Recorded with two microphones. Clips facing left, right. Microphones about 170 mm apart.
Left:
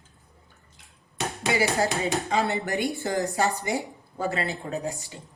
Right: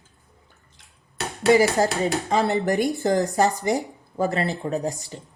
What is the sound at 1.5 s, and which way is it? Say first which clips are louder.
Speech: right 7 dB; 40° right (ahead or behind).